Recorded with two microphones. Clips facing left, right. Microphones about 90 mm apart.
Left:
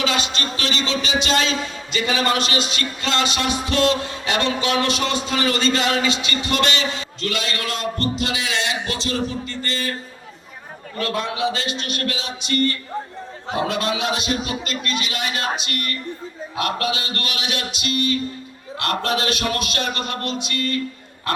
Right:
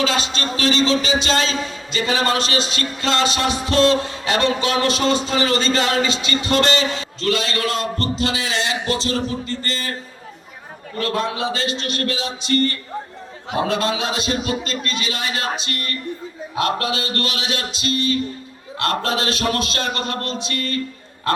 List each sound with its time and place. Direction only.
0.0 s a man's voice: 30° right (ahead or behind)
10.9 s a man's voice: 30° right (ahead or behind)